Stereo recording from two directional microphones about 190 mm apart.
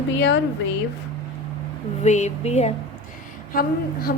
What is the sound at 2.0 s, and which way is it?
Speech, 35° left (ahead or behind).